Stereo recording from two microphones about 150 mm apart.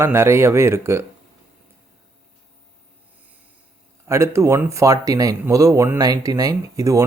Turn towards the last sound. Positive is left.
turn(degrees=-20)  # may be behind; listen again after turning